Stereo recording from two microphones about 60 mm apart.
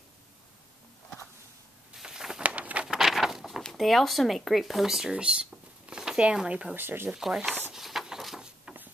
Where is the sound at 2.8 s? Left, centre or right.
Centre.